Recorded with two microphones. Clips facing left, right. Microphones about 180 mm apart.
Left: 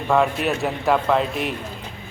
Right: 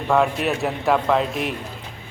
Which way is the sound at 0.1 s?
Centre (ahead or behind).